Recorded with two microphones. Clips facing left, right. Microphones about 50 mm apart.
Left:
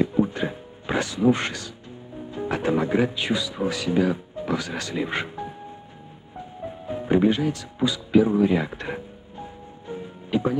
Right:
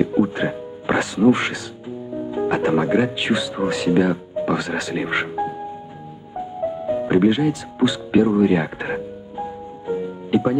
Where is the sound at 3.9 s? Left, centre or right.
Right.